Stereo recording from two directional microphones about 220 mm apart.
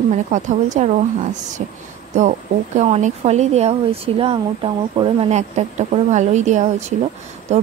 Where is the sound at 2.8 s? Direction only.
30° right (ahead or behind).